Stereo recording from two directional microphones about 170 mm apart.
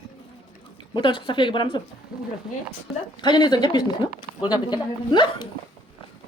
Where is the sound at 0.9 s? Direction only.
25° left (ahead or behind).